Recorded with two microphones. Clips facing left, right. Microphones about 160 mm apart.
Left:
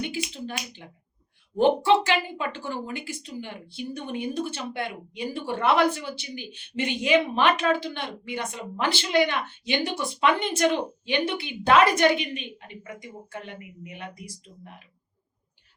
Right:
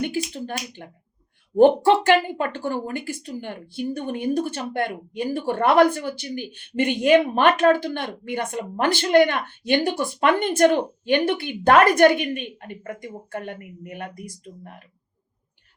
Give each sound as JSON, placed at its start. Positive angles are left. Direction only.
{"t": 0.0, "sound": "a woman's voice", "side_deg": -50}